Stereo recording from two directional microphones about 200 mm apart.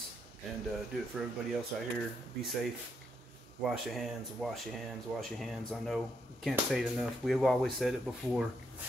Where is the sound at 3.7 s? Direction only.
Centre (ahead or behind).